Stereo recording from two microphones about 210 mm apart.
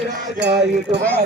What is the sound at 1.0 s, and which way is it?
Speech, 5° left (ahead or behind).